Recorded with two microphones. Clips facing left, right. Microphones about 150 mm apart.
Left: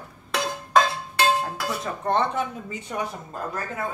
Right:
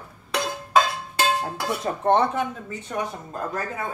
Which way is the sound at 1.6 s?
20° right (ahead or behind).